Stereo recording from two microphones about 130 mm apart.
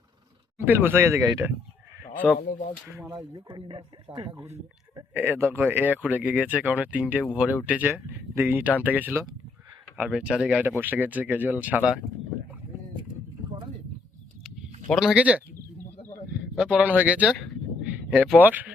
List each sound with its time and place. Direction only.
0.6 s speech: 15° right (ahead or behind)
2.5 s speech: 80° left
3.3 s speech: 40° right (ahead or behind)
5.1 s speech: 15° right (ahead or behind)
14.8 s speech: centre (ahead or behind)
16.6 s speech: 10° right (ahead or behind)